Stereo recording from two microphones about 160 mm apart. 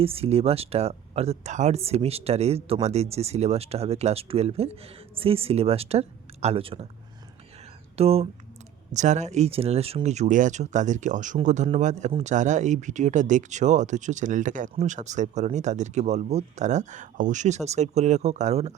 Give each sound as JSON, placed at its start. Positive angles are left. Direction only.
{"t": 0.0, "sound": "speech", "side_deg": -35}
{"t": 7.9, "sound": "speech", "side_deg": -40}